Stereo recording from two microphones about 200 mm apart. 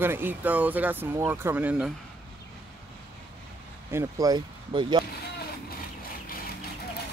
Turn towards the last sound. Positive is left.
turn(degrees=45)  # may be behind; listen again after turning